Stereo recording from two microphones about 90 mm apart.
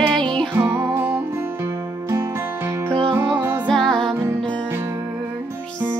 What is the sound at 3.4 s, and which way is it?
Music, 20° right (ahead or behind).